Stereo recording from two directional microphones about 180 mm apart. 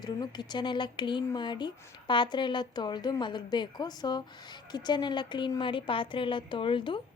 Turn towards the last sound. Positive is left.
turn(degrees=30)  # may be behind; listen again after turning